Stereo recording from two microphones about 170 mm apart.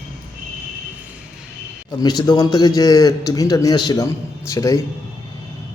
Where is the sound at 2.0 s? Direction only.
25° left (ahead or behind).